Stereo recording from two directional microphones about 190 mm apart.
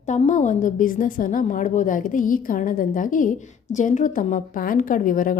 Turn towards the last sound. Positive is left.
turn(degrees=45)  # may be behind; listen again after turning